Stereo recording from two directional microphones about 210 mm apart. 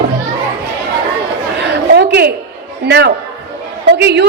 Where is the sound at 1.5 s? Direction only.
55° right (ahead or behind).